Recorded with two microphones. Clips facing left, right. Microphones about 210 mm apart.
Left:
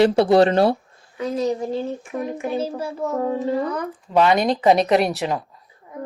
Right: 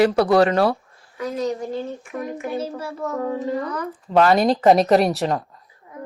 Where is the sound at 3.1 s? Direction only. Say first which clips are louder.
Left 2 dB; 25° left (ahead or behind).